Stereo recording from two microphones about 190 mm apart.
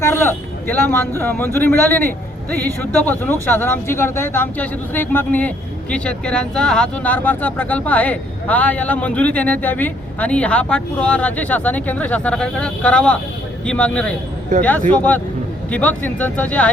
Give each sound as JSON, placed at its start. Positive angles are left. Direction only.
{"t": 0.0, "sound": "speech", "side_deg": 15}
{"t": 14.5, "sound": "speech", "side_deg": -40}
{"t": 14.8, "sound": "speech", "side_deg": 10}